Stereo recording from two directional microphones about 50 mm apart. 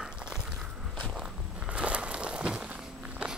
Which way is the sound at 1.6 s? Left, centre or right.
Right.